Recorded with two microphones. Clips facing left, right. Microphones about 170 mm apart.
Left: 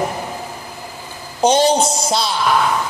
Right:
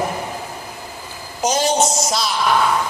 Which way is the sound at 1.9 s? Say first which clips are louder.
Left 2 dB; 30° left (ahead or behind).